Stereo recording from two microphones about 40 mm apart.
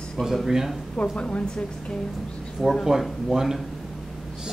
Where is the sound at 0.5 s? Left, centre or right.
Centre.